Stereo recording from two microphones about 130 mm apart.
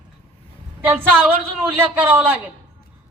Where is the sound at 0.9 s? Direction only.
15° right (ahead or behind).